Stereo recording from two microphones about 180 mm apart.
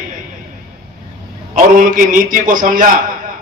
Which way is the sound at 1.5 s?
50° right (ahead or behind).